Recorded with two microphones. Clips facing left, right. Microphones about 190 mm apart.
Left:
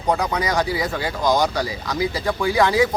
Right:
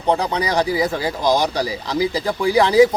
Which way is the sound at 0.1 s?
30° right (ahead or behind).